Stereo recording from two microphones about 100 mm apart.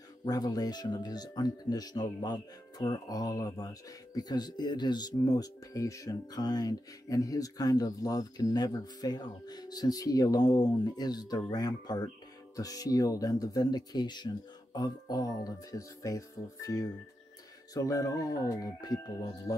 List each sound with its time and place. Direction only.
0.2 s speech: 40° left (ahead or behind)